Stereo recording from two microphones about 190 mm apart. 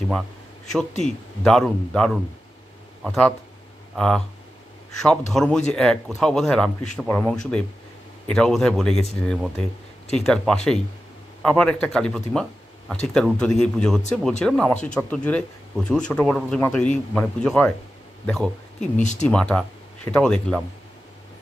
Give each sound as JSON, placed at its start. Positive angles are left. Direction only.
{"t": 1.0, "sound": "speech", "side_deg": 5}
{"t": 5.3, "sound": "speech", "side_deg": 5}
{"t": 18.9, "sound": "speech", "side_deg": 40}
{"t": 19.2, "sound": "speech", "side_deg": 5}